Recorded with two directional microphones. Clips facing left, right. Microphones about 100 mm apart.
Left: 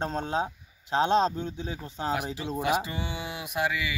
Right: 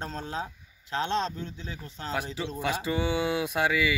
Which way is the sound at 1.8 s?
20° left (ahead or behind).